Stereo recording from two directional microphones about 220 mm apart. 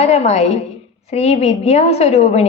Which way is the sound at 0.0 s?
30° left (ahead or behind).